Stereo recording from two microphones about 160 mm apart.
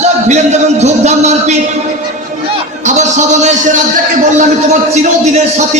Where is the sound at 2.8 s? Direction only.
45° right (ahead or behind).